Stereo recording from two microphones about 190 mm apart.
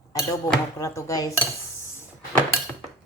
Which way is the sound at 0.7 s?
15° left (ahead or behind).